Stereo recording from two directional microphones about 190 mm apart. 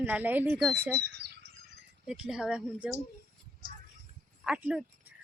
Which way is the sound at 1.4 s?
65° right (ahead or behind).